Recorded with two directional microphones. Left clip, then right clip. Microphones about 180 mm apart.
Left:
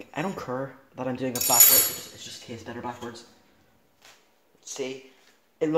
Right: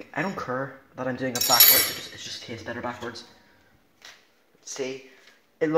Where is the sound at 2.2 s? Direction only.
5° right (ahead or behind).